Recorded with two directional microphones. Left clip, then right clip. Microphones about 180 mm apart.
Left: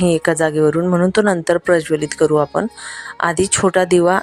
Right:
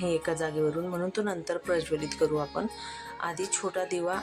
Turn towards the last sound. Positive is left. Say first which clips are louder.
# left 17 dB
turn(degrees=55)  # may be behind; listen again after turning